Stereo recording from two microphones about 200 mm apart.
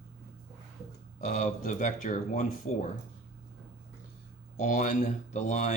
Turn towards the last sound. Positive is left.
turn(degrees=35)  # may be behind; listen again after turning